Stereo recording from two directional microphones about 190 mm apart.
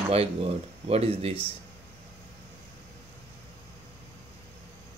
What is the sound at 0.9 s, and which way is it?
Speech, 30° right (ahead or behind).